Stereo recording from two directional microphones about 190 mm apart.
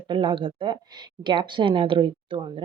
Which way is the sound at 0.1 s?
25° right (ahead or behind).